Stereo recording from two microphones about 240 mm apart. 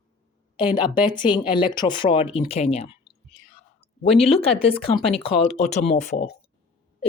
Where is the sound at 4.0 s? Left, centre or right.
Left.